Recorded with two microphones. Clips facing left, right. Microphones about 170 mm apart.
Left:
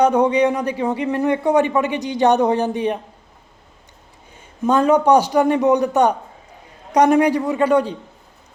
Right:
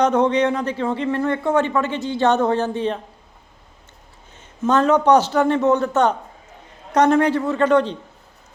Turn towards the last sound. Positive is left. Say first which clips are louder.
# even
turn(degrees=10)  # may be behind; listen again after turning